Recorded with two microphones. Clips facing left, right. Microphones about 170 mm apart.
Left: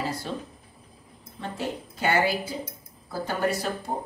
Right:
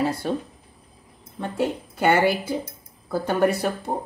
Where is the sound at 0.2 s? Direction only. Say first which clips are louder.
Right 7 dB; 55° right (ahead or behind).